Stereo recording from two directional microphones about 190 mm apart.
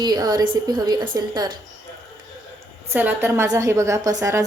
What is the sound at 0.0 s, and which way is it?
A woman's voice, 20° right (ahead or behind).